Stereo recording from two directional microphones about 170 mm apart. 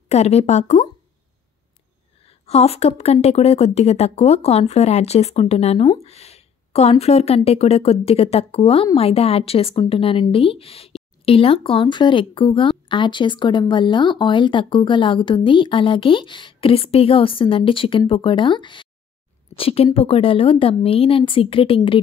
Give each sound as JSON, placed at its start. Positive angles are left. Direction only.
{"t": 0.1, "sound": "speech", "side_deg": 40}
{"t": 2.2, "sound": "speech", "side_deg": 35}